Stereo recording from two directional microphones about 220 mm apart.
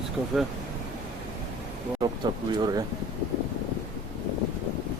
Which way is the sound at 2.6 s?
20° right (ahead or behind).